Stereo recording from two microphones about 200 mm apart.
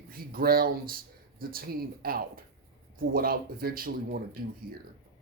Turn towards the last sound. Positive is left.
turn(degrees=-45)  # may be behind; listen again after turning